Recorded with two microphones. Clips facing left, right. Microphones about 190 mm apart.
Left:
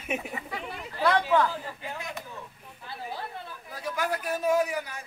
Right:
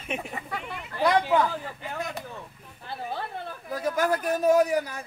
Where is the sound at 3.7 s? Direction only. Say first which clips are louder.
Right 6 dB; 45° right (ahead or behind).